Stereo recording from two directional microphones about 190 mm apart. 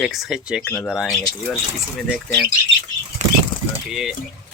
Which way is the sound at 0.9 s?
Centre (ahead or behind).